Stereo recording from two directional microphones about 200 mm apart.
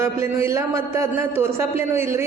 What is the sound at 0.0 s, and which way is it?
A man's voice, 15° right (ahead or behind).